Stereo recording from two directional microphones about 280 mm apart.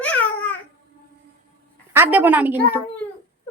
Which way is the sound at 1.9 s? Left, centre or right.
Centre.